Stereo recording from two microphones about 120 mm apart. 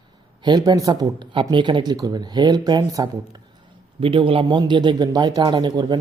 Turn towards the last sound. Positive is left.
turn(degrees=-40)  # may be behind; listen again after turning